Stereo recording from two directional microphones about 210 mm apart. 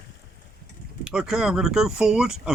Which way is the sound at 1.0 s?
5° right (ahead or behind).